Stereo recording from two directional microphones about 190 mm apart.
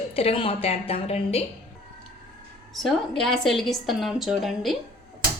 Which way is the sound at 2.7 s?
Centre (ahead or behind).